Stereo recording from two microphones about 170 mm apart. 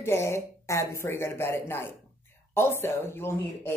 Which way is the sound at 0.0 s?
15° left (ahead or behind).